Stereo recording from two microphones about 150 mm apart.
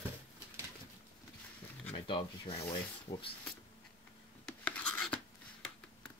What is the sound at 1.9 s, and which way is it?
Speech, 35° left (ahead or behind).